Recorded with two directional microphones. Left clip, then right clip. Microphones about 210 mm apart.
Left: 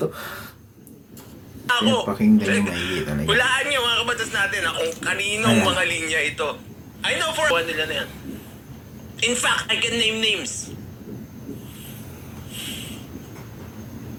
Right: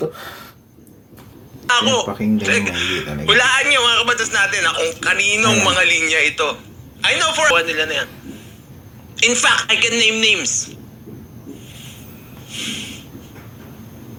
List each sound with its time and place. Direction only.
1.6 s a man's voice: 20° right (ahead or behind)
9.1 s a man's voice: 25° right (ahead or behind)
12.5 s a sound: 25° right (ahead or behind)